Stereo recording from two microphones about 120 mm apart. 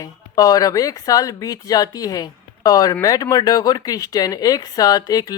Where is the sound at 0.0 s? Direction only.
30° left (ahead or behind).